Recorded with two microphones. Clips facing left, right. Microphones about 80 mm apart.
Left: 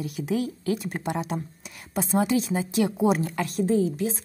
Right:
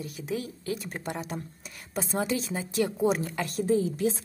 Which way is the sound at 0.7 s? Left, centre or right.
Left.